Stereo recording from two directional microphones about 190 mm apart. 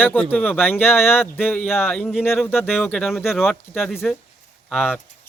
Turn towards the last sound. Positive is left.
turn(degrees=0)  # may be behind; listen again after turning